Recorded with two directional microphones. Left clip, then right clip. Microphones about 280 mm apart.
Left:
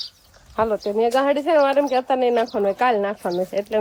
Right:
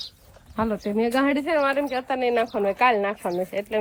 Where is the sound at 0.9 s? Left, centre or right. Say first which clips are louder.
Left 4 dB; centre.